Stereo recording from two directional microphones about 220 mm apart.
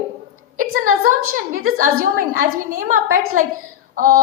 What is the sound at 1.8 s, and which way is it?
A woman's voice, 35° right (ahead or behind).